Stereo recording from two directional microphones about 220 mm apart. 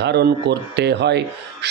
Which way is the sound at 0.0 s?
50° right (ahead or behind).